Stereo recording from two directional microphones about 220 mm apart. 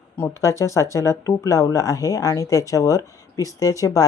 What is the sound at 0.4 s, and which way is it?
Speech, 15° left (ahead or behind).